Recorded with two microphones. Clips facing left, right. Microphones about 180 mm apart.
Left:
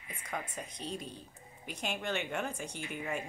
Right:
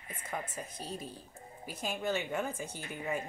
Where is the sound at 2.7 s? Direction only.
45° right (ahead or behind).